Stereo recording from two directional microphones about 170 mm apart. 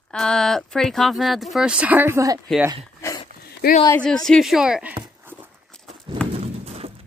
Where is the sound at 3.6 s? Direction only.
65° left (ahead or behind).